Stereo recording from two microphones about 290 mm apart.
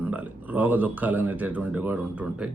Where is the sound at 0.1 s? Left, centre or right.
Centre.